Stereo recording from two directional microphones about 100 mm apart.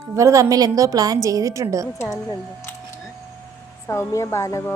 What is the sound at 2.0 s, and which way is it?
Speech, 25° left (ahead or behind).